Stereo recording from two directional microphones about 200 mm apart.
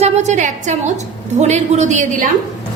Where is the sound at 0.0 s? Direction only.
35° right (ahead or behind).